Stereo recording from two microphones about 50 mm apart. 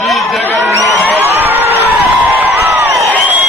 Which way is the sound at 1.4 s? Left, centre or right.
Right.